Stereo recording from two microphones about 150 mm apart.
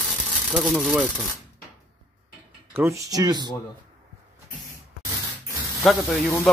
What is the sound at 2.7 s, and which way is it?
Speech, 20° right (ahead or behind).